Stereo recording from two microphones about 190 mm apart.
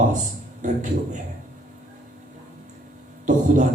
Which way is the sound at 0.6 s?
40° right (ahead or behind).